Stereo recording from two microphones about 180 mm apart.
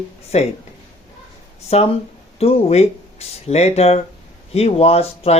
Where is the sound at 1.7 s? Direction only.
35° left (ahead or behind).